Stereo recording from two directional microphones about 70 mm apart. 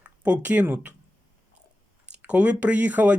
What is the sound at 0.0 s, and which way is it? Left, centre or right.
Speech, centre.